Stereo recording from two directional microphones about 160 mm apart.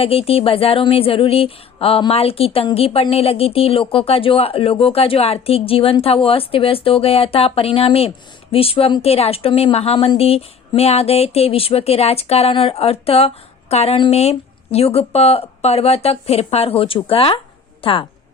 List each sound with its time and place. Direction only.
0.0 s speech: 35° left (ahead or behind)